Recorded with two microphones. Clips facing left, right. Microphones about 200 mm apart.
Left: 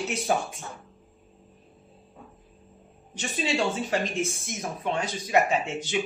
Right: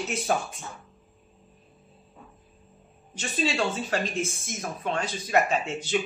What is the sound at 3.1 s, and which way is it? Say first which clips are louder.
A man's voice: even; 15° left (ahead or behind).